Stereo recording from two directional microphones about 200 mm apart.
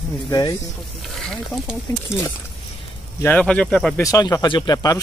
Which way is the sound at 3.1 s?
10° left (ahead or behind).